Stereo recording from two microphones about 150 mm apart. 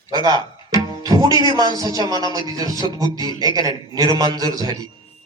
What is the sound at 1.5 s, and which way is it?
Speech, 25° right (ahead or behind).